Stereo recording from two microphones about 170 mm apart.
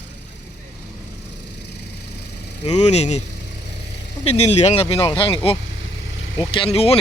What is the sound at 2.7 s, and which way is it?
Speech, 40° left (ahead or behind).